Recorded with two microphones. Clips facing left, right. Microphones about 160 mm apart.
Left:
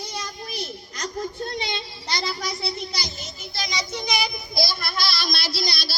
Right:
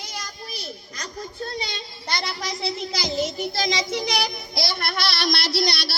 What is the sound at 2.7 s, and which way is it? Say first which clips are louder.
Speech: right 7 dB; 90° right.